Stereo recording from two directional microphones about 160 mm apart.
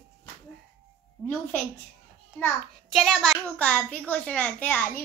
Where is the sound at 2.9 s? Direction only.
Centre (ahead or behind).